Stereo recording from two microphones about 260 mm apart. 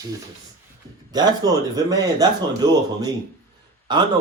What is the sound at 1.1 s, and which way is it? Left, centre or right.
A man's voice, centre.